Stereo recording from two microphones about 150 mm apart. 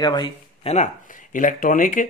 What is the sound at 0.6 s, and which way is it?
Speech, 50° left (ahead or behind).